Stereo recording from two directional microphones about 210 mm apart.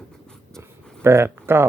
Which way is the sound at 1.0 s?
10° right (ahead or behind).